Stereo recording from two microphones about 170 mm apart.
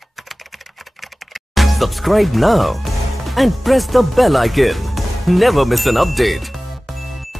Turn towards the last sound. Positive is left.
turn(degrees=0)  # may be behind; listen again after turning